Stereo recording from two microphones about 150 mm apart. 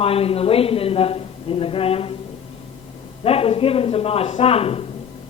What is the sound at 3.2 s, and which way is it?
A woman's voice, 40° left (ahead or behind).